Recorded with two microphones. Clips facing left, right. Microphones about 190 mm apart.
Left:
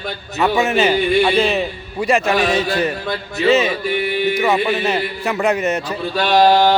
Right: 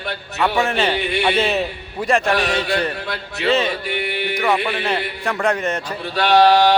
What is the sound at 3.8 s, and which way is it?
Music, 65° right (ahead or behind).